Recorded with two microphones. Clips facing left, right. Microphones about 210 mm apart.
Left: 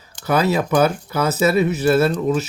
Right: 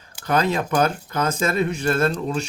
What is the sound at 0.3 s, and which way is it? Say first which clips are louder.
Speech: left 3 dB; 10° left (ahead or behind).